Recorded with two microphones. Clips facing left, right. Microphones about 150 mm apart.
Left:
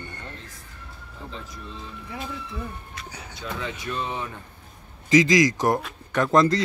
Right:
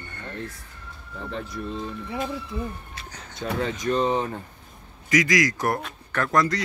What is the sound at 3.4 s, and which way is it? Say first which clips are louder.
Speech: right 6 dB; 50° right (ahead or behind).